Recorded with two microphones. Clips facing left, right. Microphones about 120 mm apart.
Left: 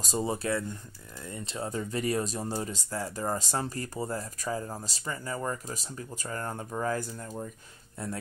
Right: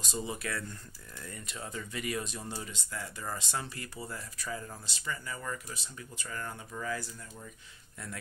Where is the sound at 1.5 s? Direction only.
35° left (ahead or behind).